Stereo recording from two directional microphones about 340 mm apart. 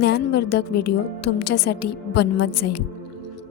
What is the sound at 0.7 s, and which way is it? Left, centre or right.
A woman's voice, left.